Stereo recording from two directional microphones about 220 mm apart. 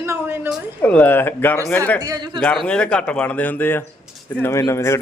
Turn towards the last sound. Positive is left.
turn(degrees=10)  # may be behind; listen again after turning